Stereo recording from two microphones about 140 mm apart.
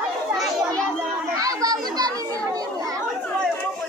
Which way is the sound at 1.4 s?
25° right (ahead or behind).